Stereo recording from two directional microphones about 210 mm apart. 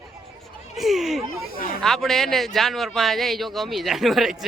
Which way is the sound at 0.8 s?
Centre (ahead or behind).